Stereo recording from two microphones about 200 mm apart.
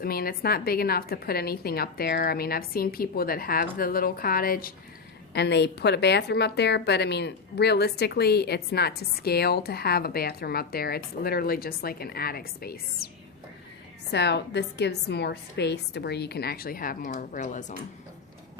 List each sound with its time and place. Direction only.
0.0 s a woman's voice: 50° left (ahead or behind)
14.1 s a woman's voice: 55° left (ahead or behind); by 17.7 s 40° left (ahead or behind)